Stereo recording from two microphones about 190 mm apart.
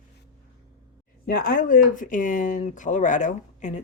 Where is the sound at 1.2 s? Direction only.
50° left (ahead or behind).